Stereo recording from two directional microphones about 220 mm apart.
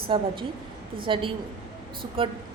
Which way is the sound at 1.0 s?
25° right (ahead or behind).